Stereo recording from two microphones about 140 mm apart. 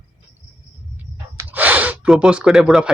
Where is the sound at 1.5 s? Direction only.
10° right (ahead or behind).